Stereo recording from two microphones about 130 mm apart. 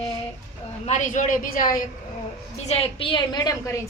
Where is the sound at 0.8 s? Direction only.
70° left (ahead or behind); by 1.8 s 90° left.